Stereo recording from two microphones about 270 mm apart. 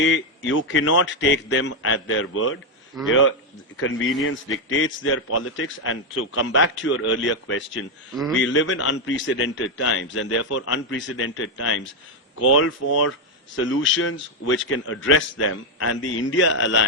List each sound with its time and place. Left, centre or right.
0.0 s a man's voice: left